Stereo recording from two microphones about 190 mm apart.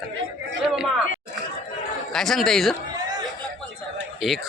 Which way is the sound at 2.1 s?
Centre (ahead or behind).